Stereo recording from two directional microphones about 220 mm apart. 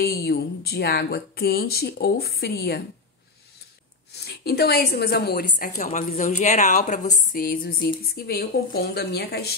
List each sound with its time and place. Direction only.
0.0 s speech: 45° left (ahead or behind)
4.2 s speech: 45° left (ahead or behind)